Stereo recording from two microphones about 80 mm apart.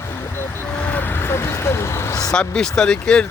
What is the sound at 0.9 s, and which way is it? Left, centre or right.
Vehicle, left.